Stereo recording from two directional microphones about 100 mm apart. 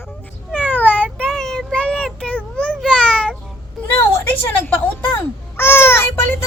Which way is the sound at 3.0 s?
10° left (ahead or behind).